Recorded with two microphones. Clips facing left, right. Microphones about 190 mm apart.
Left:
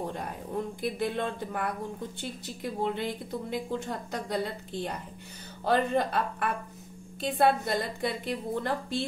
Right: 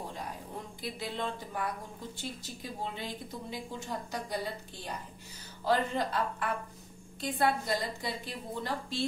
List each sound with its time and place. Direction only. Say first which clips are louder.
0.8 s speech: left 5 dB; 55° left (ahead or behind)